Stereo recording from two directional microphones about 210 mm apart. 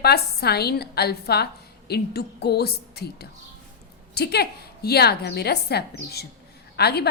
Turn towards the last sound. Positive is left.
turn(degrees=50)  # may be behind; listen again after turning